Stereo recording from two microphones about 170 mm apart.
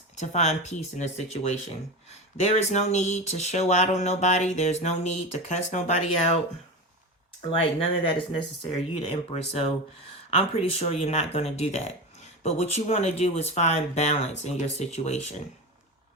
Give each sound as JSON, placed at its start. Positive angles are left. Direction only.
{"t": 0.2, "sound": "speech", "side_deg": 40}
{"t": 7.6, "sound": "speech", "side_deg": 30}